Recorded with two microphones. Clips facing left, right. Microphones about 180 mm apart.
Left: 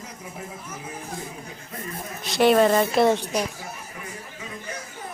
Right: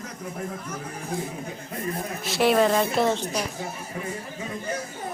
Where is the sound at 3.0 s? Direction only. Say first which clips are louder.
Left 4 dB; 15° left (ahead or behind).